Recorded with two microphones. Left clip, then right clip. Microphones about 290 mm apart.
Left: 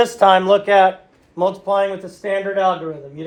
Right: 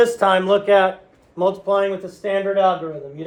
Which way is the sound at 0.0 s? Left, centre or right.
Left.